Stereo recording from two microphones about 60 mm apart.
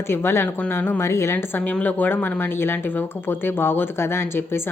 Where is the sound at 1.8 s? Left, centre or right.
Left.